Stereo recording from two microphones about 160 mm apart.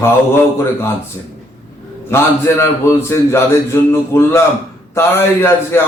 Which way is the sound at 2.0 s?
15° left (ahead or behind).